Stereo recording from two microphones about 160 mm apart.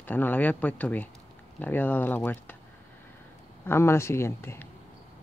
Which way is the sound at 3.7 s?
15° left (ahead or behind).